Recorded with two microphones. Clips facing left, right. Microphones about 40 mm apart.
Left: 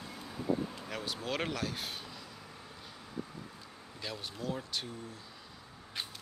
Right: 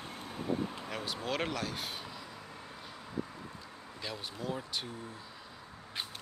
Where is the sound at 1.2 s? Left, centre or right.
Centre.